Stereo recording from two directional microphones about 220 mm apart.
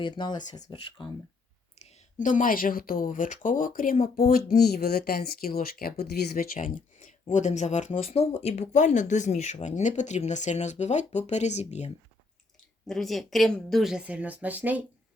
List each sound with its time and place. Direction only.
0.0 s speech: 20° left (ahead or behind)
1.8 s speech: 35° left (ahead or behind)
12.9 s a woman's voice: centre (ahead or behind)